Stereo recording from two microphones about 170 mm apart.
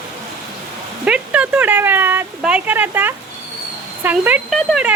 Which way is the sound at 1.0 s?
5° right (ahead or behind).